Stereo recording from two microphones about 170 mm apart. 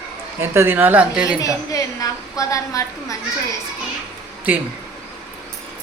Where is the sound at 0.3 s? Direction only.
15° right (ahead or behind).